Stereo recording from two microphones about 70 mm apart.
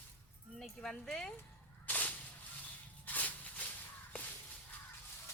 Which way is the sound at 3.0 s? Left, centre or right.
Left.